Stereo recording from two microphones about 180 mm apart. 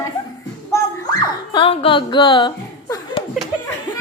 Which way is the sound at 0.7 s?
20° left (ahead or behind).